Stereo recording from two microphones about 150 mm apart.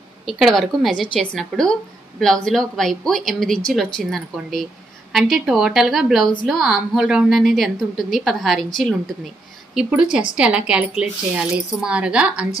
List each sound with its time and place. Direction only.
0.2 s a woman's voice: centre (ahead or behind)
9.8 s a woman's voice: 5° right (ahead or behind)